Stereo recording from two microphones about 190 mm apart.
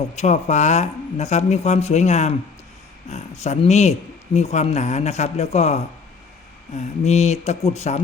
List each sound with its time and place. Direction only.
0.2 s speech: 35° left (ahead or behind)